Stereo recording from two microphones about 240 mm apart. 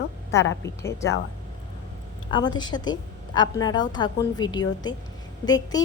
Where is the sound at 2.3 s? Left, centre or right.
Centre.